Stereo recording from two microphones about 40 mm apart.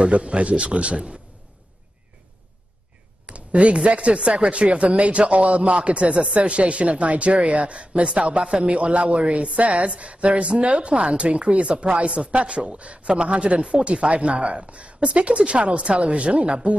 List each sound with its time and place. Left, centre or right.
0.1 s a man's voice: right
3.3 s a man's voice: right